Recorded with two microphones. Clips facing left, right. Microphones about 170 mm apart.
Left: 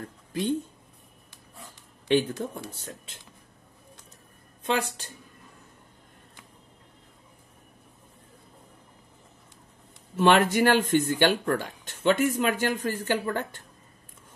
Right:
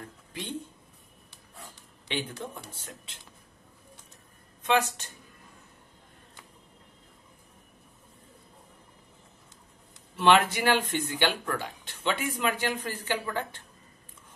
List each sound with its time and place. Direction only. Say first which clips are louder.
0.3 s speech: left 11 dB; 40° left (ahead or behind)
2.0 s speech: left 10 dB; 45° left (ahead or behind)
10.1 s speech: left 2 dB; 45° left (ahead or behind)